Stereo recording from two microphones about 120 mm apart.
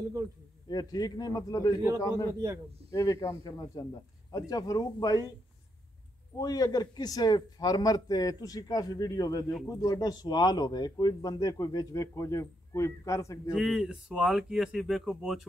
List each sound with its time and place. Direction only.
0.7 s a man's voice: 35° left (ahead or behind)
6.3 s speech: 30° left (ahead or behind)
13.5 s speech: 5° right (ahead or behind)